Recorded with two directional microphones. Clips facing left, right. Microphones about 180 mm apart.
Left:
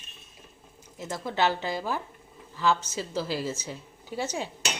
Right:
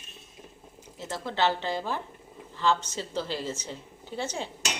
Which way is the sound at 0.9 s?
15° left (ahead or behind).